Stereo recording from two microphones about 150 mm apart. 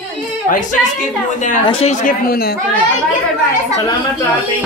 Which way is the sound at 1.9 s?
75° left (ahead or behind).